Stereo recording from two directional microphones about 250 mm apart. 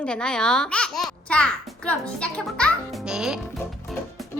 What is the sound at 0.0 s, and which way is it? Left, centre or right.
A child's voice, centre.